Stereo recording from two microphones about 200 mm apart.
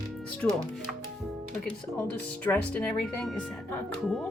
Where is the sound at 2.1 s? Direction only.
5° left (ahead or behind).